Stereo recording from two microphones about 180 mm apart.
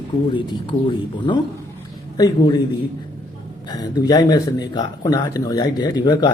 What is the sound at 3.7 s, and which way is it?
Speech, 20° left (ahead or behind).